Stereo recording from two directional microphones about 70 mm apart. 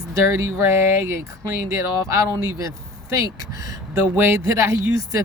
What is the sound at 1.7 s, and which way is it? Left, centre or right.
Speech, right.